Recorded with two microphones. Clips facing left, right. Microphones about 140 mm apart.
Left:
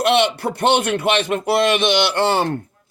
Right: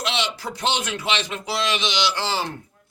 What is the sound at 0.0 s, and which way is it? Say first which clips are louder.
A man's voice: left 10 dB; 55° left (ahead or behind).